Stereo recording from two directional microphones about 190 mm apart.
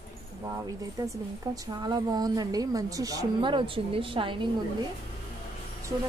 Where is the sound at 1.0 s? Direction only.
20° right (ahead or behind).